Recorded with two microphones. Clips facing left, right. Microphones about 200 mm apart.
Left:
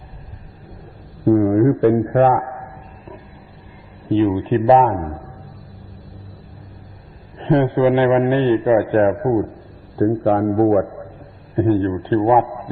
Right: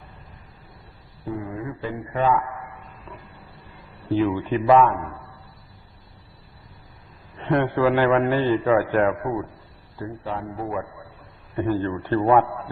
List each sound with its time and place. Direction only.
1.2 s a man's voice: 60° left (ahead or behind); by 2.6 s 45° left (ahead or behind)
4.1 s a man's voice: 25° left (ahead or behind); by 5.3 s 40° left (ahead or behind)
7.3 s a man's voice: 25° left (ahead or behind)
9.9 s a man's voice: 60° left (ahead or behind)
11.5 s a man's voice: 30° left (ahead or behind)